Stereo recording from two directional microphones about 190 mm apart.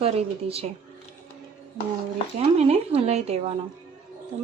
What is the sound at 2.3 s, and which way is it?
Speech, 35° right (ahead or behind).